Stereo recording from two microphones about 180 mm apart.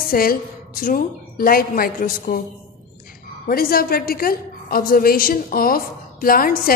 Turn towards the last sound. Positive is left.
turn(degrees=55)  # may be behind; listen again after turning